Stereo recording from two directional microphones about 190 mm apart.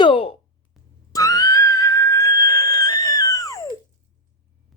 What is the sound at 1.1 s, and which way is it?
Music, 20° left (ahead or behind).